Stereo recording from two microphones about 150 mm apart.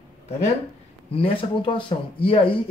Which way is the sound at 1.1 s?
35° left (ahead or behind).